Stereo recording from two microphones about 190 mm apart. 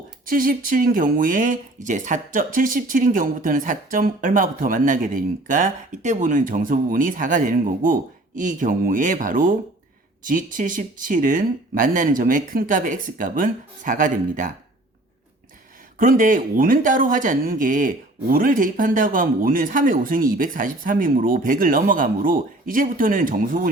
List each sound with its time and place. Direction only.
0.3 s speech: 45° right (ahead or behind)
16.0 s speech: 45° right (ahead or behind)